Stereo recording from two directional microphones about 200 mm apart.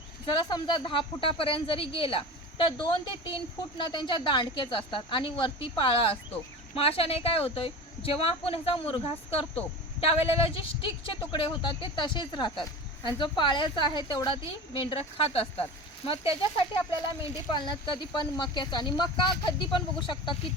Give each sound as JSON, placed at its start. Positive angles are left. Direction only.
{"t": 0.3, "sound": "speech", "side_deg": 25}